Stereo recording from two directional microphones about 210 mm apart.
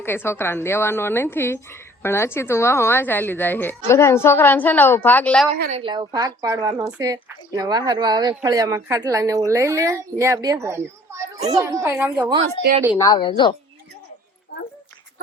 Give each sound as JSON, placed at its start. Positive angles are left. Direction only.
{"t": 0.0, "sound": "speech", "side_deg": 10}
{"t": 5.5, "sound": "a woman's voice", "side_deg": -40}
{"t": 5.8, "sound": "speech", "side_deg": -20}
{"t": 12.6, "sound": "speech", "side_deg": 30}